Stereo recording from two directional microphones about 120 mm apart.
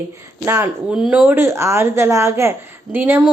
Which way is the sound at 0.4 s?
20° right (ahead or behind).